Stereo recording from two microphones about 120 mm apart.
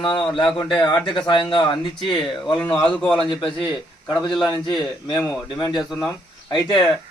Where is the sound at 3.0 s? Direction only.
5° left (ahead or behind).